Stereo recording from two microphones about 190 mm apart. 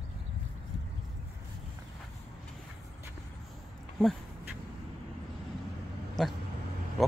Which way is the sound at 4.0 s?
Centre (ahead or behind).